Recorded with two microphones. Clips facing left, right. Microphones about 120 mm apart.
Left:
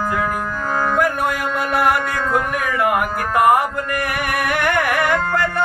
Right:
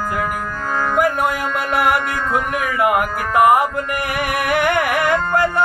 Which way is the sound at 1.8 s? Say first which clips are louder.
Even; 20° right (ahead or behind).